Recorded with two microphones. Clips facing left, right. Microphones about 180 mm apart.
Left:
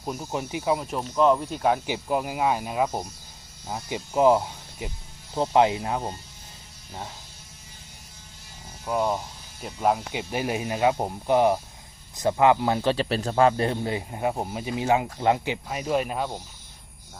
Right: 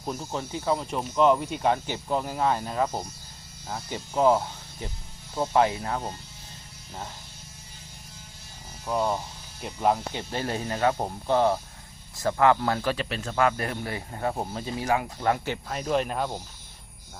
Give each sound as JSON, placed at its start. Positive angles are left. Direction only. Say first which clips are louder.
{"t": 0.0, "sound": "speech", "louder": "left 2 dB", "side_deg": 5}
{"t": 8.9, "sound": "speech", "louder": "left 1 dB", "side_deg": 5}
{"t": 15.7, "sound": "speech", "louder": "even", "side_deg": 10}